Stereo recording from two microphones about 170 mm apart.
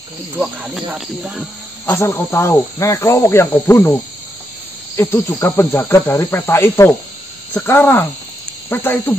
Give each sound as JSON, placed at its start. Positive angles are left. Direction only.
{"t": 0.4, "sound": "speech", "side_deg": -5}
{"t": 1.9, "sound": "speech", "side_deg": 15}
{"t": 4.9, "sound": "speech", "side_deg": 15}